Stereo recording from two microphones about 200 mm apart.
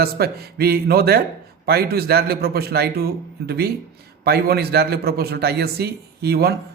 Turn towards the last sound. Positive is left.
turn(degrees=-55)  # may be behind; listen again after turning